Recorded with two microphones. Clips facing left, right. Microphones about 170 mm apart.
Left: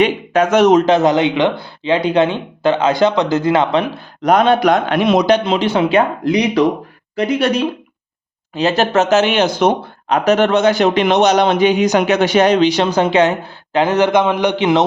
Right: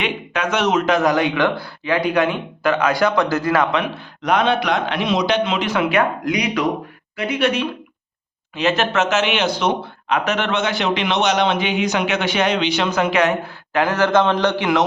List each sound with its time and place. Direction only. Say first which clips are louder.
0.0 s speech: left 9 dB; 40° left (ahead or behind); by 14.8 s 20° left (ahead or behind)